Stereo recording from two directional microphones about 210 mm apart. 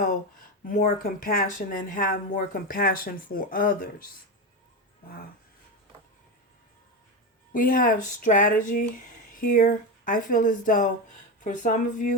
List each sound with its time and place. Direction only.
0.6 s speech: 40° left (ahead or behind)
7.5 s speech: 40° left (ahead or behind)